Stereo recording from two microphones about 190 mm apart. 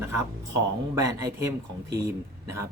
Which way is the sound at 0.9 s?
15° right (ahead or behind).